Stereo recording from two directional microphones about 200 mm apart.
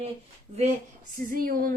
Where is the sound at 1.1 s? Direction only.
45° right (ahead or behind).